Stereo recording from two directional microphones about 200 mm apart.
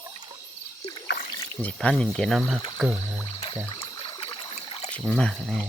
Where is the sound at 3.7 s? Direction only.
25° left (ahead or behind).